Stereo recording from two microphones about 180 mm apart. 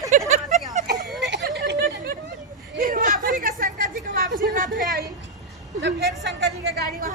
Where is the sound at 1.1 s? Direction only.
70° right (ahead or behind).